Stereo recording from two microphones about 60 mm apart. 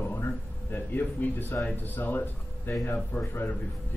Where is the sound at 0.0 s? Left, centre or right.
Left.